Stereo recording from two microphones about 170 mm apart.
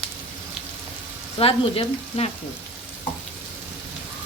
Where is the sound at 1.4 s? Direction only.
35° left (ahead or behind).